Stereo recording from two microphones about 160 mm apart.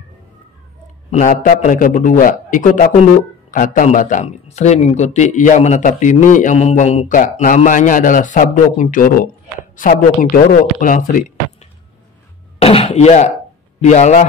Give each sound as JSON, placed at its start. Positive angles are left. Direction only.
{"t": 1.1, "sound": "a man's voice", "side_deg": 55}
{"t": 12.5, "sound": "chopping", "side_deg": 40}
{"t": 13.7, "sound": "a man's voice", "side_deg": 45}